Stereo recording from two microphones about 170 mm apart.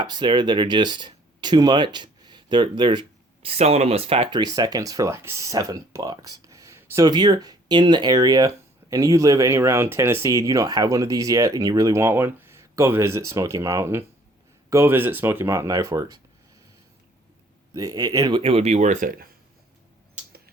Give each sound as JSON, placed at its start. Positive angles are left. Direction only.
{"t": 0.0, "sound": "speech", "side_deg": -30}
{"t": 17.7, "sound": "speech", "side_deg": -20}